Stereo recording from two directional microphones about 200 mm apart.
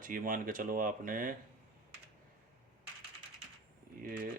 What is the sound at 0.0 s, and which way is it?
Speech, 45° right (ahead or behind).